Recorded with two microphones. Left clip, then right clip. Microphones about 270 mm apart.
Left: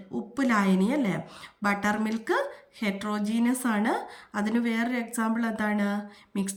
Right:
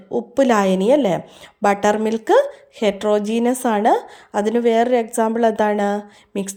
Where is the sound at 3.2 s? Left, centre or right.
Centre.